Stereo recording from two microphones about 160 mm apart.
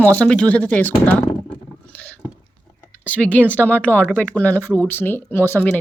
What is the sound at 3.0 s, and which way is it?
Speech, 10° left (ahead or behind).